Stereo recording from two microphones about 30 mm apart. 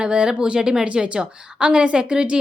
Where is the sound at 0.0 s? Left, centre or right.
Right.